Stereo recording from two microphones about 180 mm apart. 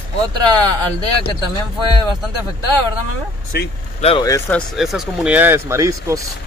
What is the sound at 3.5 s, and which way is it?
Speech, 65° left (ahead or behind).